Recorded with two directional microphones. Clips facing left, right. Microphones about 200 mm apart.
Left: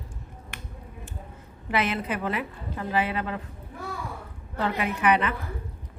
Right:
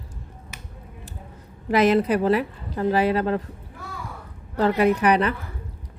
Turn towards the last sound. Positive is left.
turn(degrees=-40)  # may be behind; listen again after turning